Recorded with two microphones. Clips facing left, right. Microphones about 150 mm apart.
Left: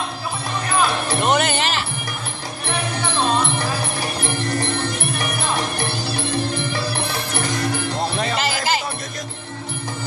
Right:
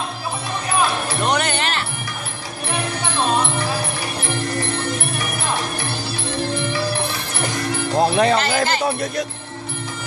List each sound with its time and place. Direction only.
1.2 s music: 5° left (ahead or behind)
8.0 s music: 55° right (ahead or behind)